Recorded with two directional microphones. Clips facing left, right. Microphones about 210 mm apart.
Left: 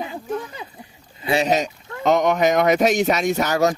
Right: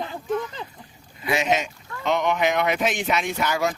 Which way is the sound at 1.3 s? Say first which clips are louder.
Left 4 dB; 35° left (ahead or behind).